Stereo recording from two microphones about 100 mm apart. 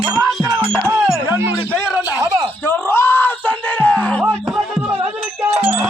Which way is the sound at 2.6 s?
25° left (ahead or behind).